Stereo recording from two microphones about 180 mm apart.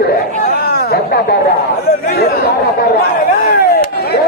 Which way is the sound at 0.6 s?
60° left (ahead or behind).